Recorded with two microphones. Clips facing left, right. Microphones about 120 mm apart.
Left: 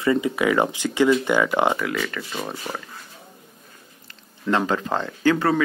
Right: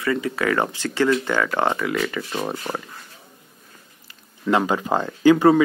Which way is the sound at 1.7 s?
Centre (ahead or behind).